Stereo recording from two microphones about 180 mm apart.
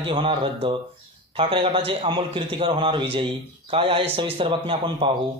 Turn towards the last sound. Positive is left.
turn(degrees=-25)  # may be behind; listen again after turning